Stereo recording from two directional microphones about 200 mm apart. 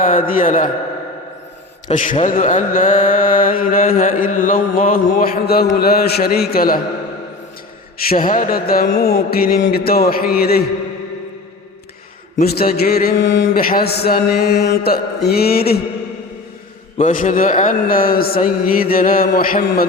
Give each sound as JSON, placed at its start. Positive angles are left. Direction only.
{"t": 0.0, "sound": "a man's voice", "side_deg": 45}
{"t": 2.0, "sound": "a man's voice", "side_deg": 40}
{"t": 8.1, "sound": "a man's voice", "side_deg": 45}
{"t": 12.4, "sound": "a man's voice", "side_deg": 50}
{"t": 13.5, "sound": "a man's voice", "side_deg": 45}
{"t": 17.0, "sound": "a man's voice", "side_deg": 40}